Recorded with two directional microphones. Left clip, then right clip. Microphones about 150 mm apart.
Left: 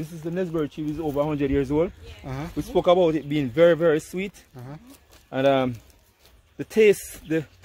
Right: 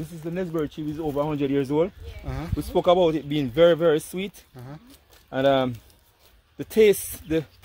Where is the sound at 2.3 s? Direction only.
10° left (ahead or behind).